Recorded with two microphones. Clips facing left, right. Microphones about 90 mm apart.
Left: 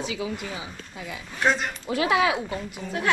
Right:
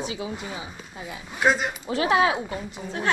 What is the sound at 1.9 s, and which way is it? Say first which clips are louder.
Speech: right 1 dB; 30° right (ahead or behind).